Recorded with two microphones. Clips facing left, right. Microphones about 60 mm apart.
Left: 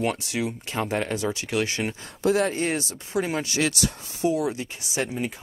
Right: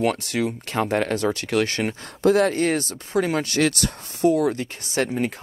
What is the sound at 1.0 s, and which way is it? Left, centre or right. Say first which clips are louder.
Speech: right 4 dB; right.